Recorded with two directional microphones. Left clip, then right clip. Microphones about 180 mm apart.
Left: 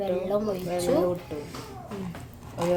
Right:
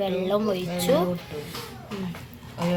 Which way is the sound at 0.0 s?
5° right (ahead or behind).